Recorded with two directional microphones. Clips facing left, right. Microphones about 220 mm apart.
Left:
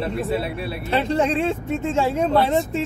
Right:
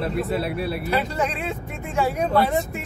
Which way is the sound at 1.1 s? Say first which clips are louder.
Left 6 dB; 25° left (ahead or behind).